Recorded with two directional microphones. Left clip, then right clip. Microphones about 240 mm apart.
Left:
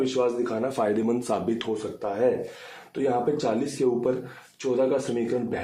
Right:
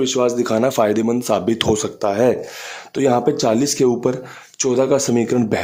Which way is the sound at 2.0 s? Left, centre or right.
Right.